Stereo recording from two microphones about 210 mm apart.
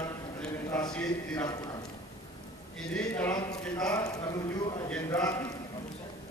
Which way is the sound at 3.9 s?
15° left (ahead or behind).